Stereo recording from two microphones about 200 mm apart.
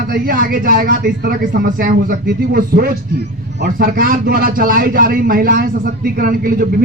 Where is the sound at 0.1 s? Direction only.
45° right (ahead or behind).